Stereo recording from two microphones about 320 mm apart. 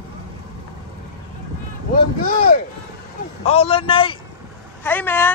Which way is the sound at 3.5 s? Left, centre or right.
Centre.